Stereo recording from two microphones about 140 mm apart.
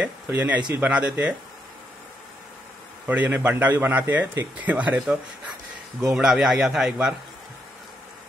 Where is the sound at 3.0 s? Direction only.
10° right (ahead or behind).